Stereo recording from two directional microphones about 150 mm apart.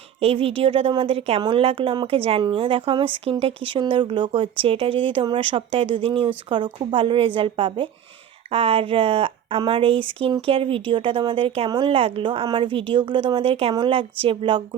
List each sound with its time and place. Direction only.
0.2 s a woman's voice: 40° right (ahead or behind)